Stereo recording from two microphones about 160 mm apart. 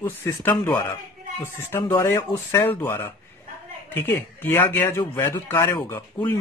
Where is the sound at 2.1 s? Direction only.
15° left (ahead or behind).